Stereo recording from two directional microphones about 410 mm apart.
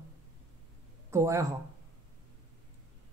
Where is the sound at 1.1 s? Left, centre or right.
Centre.